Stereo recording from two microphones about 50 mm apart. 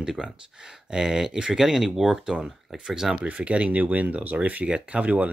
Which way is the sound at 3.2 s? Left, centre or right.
Right.